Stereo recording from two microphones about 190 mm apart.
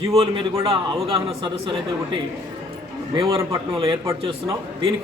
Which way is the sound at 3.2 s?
30° right (ahead or behind).